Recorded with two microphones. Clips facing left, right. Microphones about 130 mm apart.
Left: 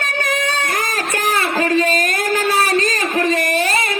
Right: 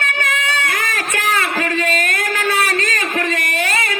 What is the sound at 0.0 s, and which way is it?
Music, 40° left (ahead or behind).